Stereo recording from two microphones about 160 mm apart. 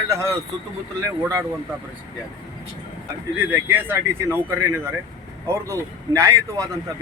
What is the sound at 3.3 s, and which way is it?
Speech, 15° right (ahead or behind).